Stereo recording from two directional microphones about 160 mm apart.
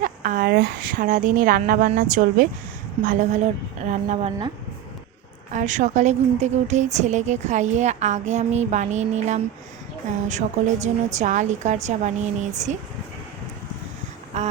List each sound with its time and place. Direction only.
0.0 s a woman's voice: 55° right (ahead or behind)
5.5 s a woman's voice: 50° right (ahead or behind)
14.3 s a sound: 45° right (ahead or behind)